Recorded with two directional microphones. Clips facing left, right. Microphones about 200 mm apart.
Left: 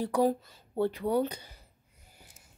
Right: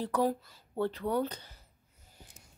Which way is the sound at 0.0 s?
15° left (ahead or behind).